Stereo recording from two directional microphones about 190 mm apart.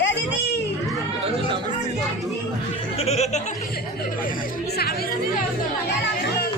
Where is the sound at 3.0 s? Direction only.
35° left (ahead or behind).